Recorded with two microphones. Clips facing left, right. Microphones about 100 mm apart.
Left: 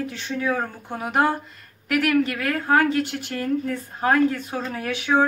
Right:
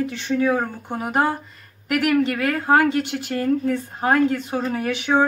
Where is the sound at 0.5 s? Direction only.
10° right (ahead or behind).